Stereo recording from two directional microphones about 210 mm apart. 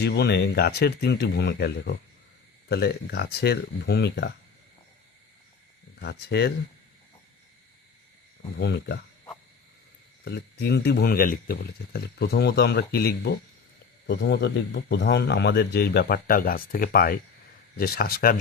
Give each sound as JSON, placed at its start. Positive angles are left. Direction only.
{"t": 0.0, "sound": "speech", "side_deg": 50}
{"t": 6.0, "sound": "speech", "side_deg": 50}
{"t": 8.5, "sound": "speech", "side_deg": 55}
{"t": 10.2, "sound": "speech", "side_deg": 50}